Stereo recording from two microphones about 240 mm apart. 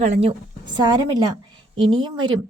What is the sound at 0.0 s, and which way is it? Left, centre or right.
A woman's voice, right.